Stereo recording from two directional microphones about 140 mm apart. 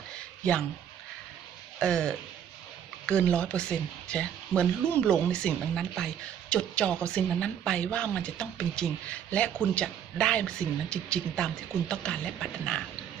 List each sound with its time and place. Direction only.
1.8 s speech: 5° left (ahead or behind)